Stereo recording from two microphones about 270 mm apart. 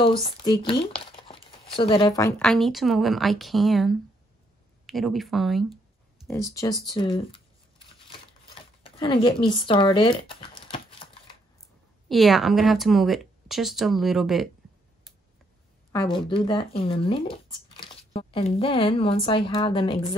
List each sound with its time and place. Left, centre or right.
0.0 s speech: centre
6.2 s speech: centre
8.8 s speech: centre
12.1 s speech: centre
15.9 s speech: centre